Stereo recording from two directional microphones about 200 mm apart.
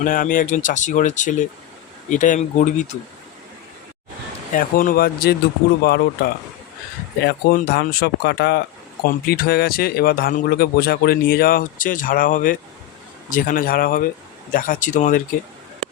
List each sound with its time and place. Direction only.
0.0 s speech: 40° left (ahead or behind)
4.5 s speech: 45° left (ahead or behind)